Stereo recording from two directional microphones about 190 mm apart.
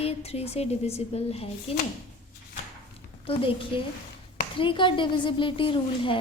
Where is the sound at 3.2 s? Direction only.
30° left (ahead or behind).